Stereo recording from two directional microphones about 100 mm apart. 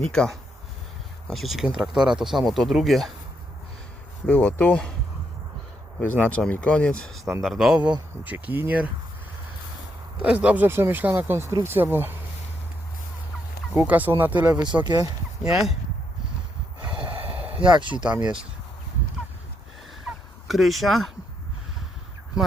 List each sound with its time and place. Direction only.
0.1 s speech: 5° left (ahead or behind)
4.3 s speech: 15° left (ahead or behind)
6.0 s speech: 20° left (ahead or behind); by 7.8 s centre (ahead or behind)
8.2 s speech: 15° right (ahead or behind)
10.2 s speech: 10° right (ahead or behind)
13.7 s speech: 15° right (ahead or behind)
14.5 s speech: 45° right (ahead or behind)
17.6 s speech: 50° right (ahead or behind)
18.0 s speech: 10° right (ahead or behind)
20.1 s fowl: centre (ahead or behind)